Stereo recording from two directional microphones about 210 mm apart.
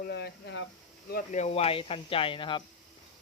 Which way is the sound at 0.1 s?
55° left (ahead or behind).